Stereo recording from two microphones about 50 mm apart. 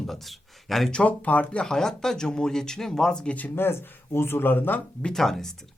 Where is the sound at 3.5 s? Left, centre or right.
Left.